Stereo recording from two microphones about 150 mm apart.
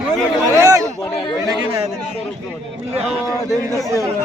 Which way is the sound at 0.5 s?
20° right (ahead or behind).